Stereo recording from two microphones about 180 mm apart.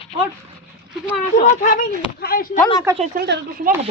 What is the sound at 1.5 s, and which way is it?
Speech, 45° left (ahead or behind).